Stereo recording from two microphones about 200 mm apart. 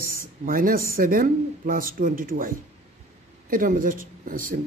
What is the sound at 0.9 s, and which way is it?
Speech, 45° right (ahead or behind).